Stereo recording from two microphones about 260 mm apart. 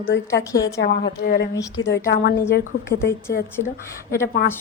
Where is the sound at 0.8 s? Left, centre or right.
Left.